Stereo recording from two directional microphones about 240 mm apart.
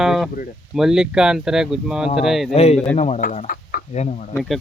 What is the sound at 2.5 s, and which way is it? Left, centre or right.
Speech, left.